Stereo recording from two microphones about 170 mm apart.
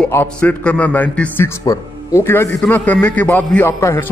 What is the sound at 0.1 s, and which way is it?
A man's voice, 10° left (ahead or behind).